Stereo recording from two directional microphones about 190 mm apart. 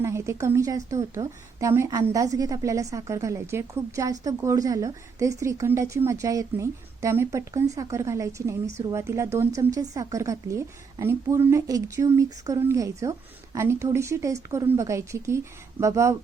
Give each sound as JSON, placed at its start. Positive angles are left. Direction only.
{"t": 0.0, "sound": "a woman's voice", "side_deg": -15}